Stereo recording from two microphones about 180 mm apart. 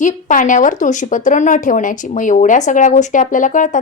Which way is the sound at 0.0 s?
45° left (ahead or behind).